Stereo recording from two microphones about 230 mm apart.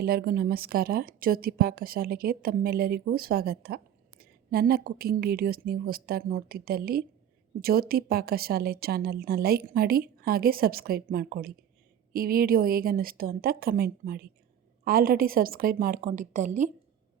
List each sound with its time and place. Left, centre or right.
0.0 s a woman's voice: right